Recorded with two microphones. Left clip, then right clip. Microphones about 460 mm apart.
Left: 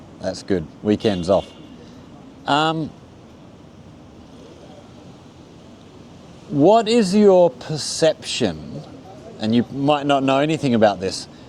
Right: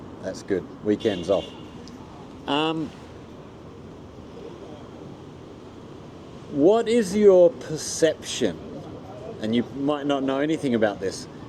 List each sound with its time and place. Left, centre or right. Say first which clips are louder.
0.2 s speech: left 4 dB; left
2.5 s speech: left 6 dB; left
6.7 s speech: left 5 dB; left